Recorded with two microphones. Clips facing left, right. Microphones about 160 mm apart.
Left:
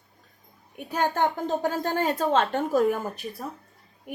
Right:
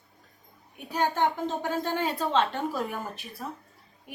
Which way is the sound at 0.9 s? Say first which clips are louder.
Left 1 dB; 50° left (ahead or behind).